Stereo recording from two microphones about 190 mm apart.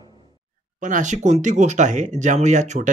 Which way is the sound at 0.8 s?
40° right (ahead or behind).